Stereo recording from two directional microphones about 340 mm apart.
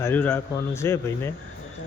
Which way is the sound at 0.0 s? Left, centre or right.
Centre.